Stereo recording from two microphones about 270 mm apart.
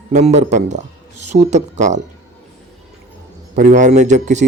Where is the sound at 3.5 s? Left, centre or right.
Right.